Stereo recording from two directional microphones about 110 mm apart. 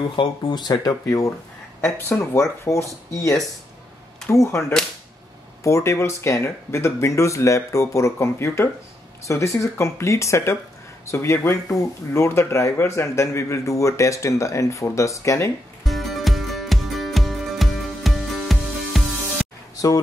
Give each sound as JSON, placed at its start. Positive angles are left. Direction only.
{"t": 0.1, "sound": "speech", "side_deg": 45}
{"t": 15.8, "sound": "music", "side_deg": 0}